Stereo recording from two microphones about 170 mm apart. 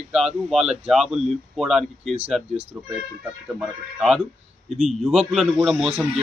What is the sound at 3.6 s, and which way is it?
A man's voice, centre (ahead or behind).